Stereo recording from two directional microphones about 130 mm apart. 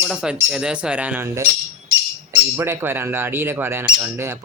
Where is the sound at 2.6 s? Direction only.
15° right (ahead or behind).